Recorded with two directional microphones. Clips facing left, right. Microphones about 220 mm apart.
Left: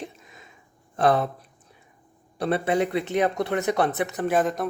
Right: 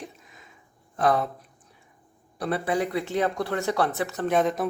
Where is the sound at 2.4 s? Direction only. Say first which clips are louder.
Left 3 dB; 25° left (ahead or behind).